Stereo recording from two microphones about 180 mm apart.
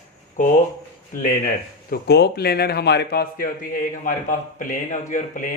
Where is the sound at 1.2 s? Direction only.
50° left (ahead or behind).